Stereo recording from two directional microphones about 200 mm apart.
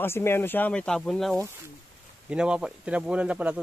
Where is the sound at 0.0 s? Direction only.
10° left (ahead or behind).